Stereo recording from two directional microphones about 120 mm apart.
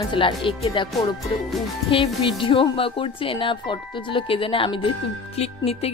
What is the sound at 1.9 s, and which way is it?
Speech, 45° left (ahead or behind).